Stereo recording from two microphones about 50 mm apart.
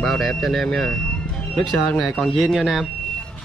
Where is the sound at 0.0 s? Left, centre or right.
Centre.